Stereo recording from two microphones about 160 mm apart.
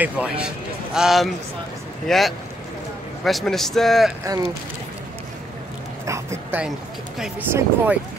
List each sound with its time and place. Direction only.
0.0 s a man's voice: 10° right (ahead or behind)
4.2 s speech: 20° right (ahead or behind)
6.0 s a man's voice: 20° right (ahead or behind)